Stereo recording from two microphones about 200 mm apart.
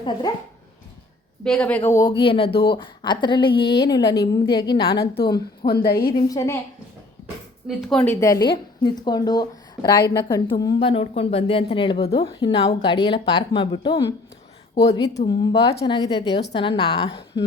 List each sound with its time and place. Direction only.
0.0 s a woman's voice: 20° left (ahead or behind)
1.5 s a woman's voice: 5° left (ahead or behind)
4.9 s a woman's voice: 50° left (ahead or behind)
6.2 s a woman's voice: 15° left (ahead or behind)
7.9 s a woman's voice: 10° left (ahead or behind)